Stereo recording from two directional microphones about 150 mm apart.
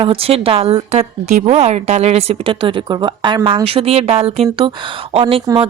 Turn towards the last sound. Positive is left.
turn(degrees=-40)  # may be behind; listen again after turning